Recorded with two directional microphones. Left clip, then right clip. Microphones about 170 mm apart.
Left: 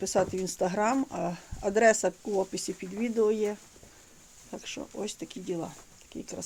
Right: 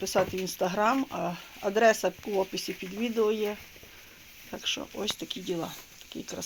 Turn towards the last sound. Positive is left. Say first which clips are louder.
# right 2 dB
turn(degrees=5)  # may be behind; listen again after turning